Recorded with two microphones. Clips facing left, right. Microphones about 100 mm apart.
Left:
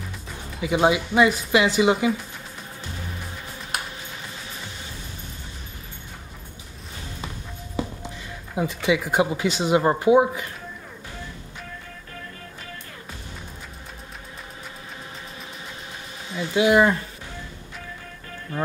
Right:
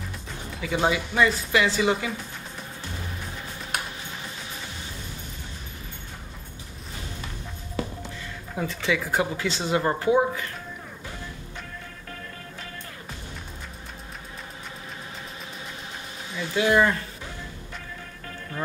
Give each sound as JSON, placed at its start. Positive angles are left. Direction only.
{"t": 0.6, "sound": "speech", "side_deg": 15}
{"t": 8.5, "sound": "speech", "side_deg": 15}
{"t": 16.3, "sound": "speech", "side_deg": 20}